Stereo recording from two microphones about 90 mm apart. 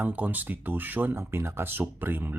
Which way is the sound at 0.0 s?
20° right (ahead or behind).